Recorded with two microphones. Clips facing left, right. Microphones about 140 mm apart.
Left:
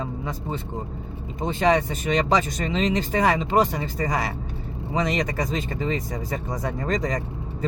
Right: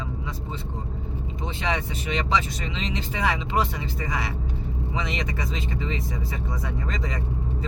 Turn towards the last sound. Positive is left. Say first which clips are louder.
# left 6 dB
turn(degrees=45)  # may be behind; listen again after turning